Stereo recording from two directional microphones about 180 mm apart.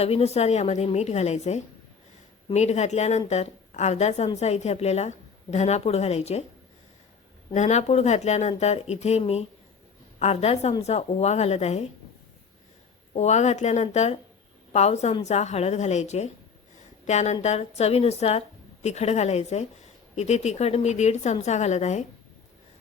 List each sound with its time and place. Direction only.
0.0 s a woman's voice: 35° left (ahead or behind)
7.5 s a woman's voice: 40° left (ahead or behind)
13.1 s a woman's voice: 40° left (ahead or behind)